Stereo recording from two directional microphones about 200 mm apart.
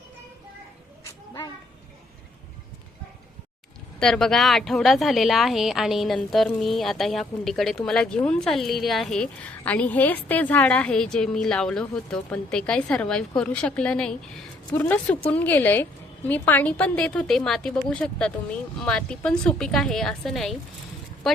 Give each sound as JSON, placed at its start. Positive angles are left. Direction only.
{"t": 4.0, "sound": "speech", "side_deg": 5}